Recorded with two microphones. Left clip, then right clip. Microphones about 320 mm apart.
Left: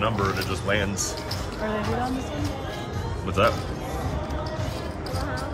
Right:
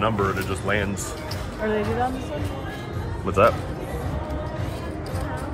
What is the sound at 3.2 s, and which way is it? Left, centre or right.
Speech, centre.